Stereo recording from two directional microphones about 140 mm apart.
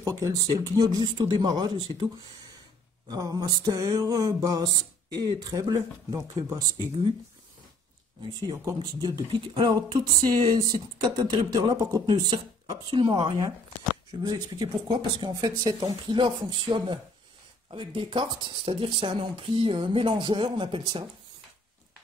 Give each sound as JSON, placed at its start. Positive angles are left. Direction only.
{"t": 0.0, "sound": "speech", "side_deg": -25}
{"t": 3.1, "sound": "speech", "side_deg": -25}
{"t": 8.2, "sound": "speech", "side_deg": -30}